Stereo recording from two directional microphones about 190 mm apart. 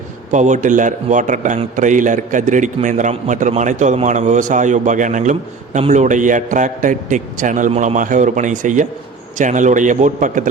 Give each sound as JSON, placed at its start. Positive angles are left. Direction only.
{"t": 0.3, "sound": "a man's voice", "side_deg": -40}